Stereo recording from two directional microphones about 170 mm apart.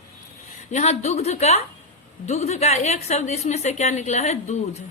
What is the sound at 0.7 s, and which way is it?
A woman's voice, 40° left (ahead or behind).